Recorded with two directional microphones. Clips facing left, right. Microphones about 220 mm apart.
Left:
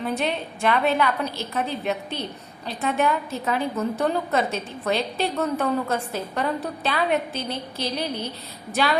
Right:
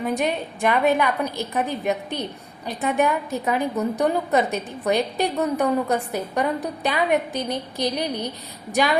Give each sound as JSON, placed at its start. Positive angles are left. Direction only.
{"t": 0.0, "sound": "a woman's voice", "side_deg": -10}